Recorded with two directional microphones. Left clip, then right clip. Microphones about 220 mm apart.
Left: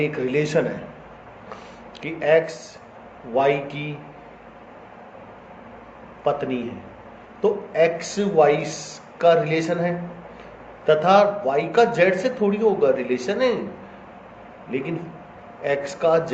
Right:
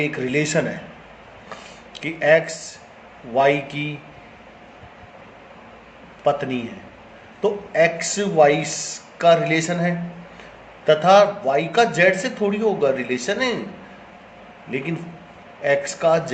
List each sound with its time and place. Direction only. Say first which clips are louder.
0.0 s a man's voice: even; 40° right (ahead or behind)
2.0 s a man's voice: right 2 dB; 40° right (ahead or behind)
6.2 s a man's voice: right 2 dB; 40° right (ahead or behind)
14.7 s a man's voice: even; 40° right (ahead or behind)